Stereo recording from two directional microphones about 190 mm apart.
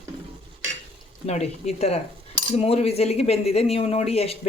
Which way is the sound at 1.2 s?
35° left (ahead or behind).